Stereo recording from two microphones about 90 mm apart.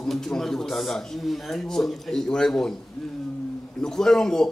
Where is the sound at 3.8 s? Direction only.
5° left (ahead or behind).